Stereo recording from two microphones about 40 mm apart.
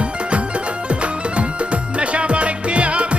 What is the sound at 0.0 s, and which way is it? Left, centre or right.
Music, right.